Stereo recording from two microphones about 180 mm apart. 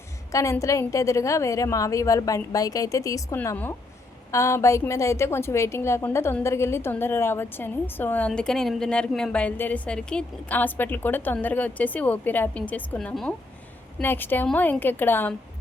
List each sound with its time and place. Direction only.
0.3 s a woman's voice: 15° left (ahead or behind)